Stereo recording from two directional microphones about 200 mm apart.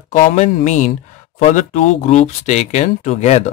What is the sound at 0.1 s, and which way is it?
Speech, 40° left (ahead or behind).